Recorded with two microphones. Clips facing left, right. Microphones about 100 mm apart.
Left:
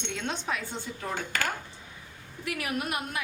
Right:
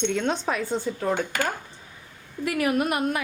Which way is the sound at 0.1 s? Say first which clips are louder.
Right 7 dB; 50° right (ahead or behind).